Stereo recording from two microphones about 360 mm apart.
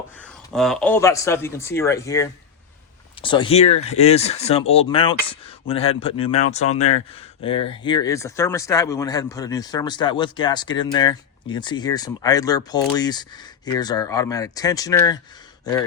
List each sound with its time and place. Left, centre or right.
0.2 s speech: centre